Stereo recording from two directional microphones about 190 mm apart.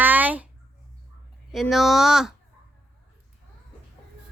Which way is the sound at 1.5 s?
Centre (ahead or behind).